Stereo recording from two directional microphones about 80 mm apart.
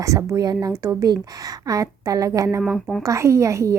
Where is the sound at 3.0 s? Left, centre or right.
Right.